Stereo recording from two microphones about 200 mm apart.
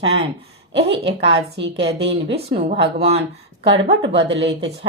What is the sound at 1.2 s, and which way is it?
Speech, 60° right (ahead or behind).